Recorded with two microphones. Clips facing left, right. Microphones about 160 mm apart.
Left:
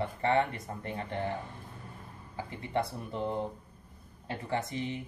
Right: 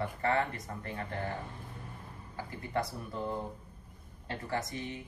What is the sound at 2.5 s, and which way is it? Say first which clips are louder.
Speech: left 2 dB; 25° left (ahead or behind).